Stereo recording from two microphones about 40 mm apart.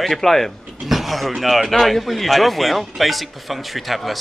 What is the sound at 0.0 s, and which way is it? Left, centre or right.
Speech, centre.